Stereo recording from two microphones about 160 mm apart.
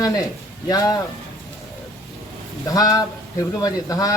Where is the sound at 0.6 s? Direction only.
25° left (ahead or behind).